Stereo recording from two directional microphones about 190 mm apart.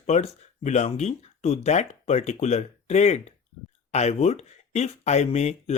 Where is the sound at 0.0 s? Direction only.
35° left (ahead or behind).